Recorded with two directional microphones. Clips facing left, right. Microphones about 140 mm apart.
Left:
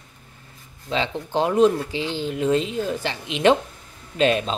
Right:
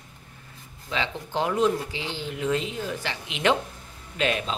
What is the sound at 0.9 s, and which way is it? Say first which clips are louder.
Speech: left 5 dB; 30° left (ahead or behind).